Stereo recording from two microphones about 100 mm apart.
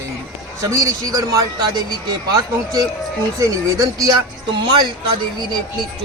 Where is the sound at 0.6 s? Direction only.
35° right (ahead or behind).